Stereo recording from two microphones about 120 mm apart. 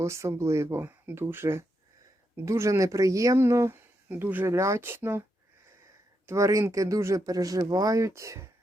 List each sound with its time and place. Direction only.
0.0 s speech: 25° right (ahead or behind)
6.2 s speech: 25° right (ahead or behind)